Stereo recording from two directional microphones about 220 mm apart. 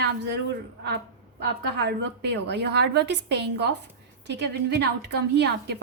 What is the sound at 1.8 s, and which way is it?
A woman's voice, 50° right (ahead or behind).